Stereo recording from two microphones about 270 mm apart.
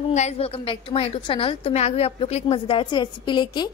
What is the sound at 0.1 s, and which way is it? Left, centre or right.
A woman's voice, left.